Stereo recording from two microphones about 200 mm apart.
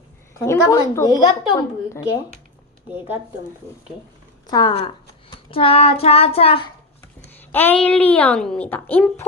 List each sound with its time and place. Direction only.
0.3 s a woman's voice: 15° left (ahead or behind)
4.4 s child singing: 20° left (ahead or behind)
7.5 s a woman's voice: 10° left (ahead or behind)